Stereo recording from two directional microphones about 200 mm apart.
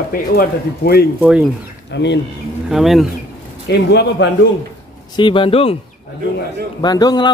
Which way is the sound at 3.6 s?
55° left (ahead or behind).